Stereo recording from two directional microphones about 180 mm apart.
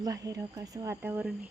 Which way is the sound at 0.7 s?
15° right (ahead or behind).